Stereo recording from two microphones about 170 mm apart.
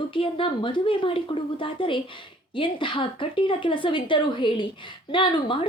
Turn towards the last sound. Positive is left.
turn(degrees=30)  # may be behind; listen again after turning